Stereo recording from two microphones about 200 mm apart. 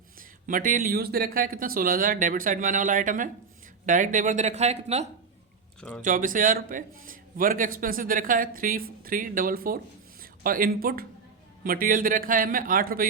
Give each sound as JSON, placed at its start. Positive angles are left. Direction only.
{"t": 0.2, "sound": "a man's voice", "side_deg": -40}